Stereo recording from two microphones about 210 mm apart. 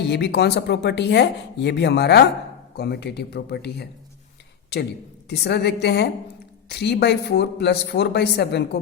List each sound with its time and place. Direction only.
0.1 s speech: 55° left (ahead or behind)